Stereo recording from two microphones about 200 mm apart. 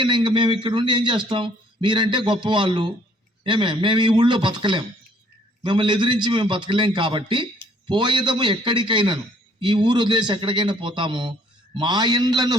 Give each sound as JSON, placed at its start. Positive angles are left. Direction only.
{"t": 0.0, "sound": "a man's voice", "side_deg": -25}